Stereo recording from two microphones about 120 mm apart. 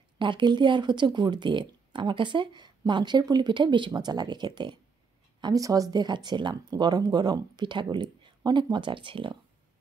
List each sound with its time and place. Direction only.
0.2 s speech: 40° right (ahead or behind)